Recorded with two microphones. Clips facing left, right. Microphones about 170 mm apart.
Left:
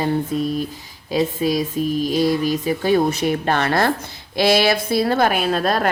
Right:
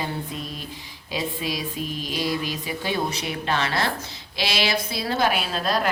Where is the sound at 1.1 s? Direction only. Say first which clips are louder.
Left 9 dB; 45° left (ahead or behind).